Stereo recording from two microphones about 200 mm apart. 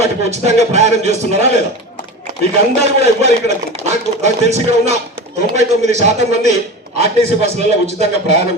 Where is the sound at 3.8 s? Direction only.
35° right (ahead or behind).